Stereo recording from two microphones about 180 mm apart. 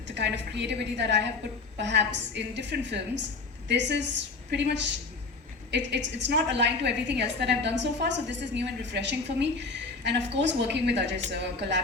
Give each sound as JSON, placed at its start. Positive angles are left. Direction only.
{"t": 0.1, "sound": "a woman's voice", "side_deg": -70}
{"t": 5.7, "sound": "a woman's voice", "side_deg": -80}